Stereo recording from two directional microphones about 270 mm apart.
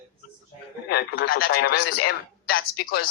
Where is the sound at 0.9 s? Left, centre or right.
Left.